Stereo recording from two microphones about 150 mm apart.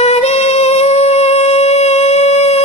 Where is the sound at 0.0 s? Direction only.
45° left (ahead or behind).